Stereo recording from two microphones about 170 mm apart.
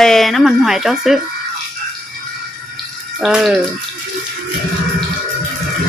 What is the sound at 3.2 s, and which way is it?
Speech, 5° right (ahead or behind).